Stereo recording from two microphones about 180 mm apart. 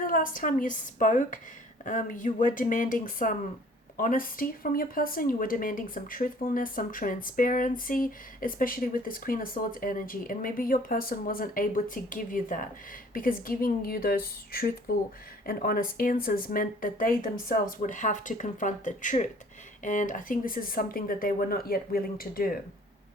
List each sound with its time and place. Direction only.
0.1 s speech: 50° left (ahead or behind)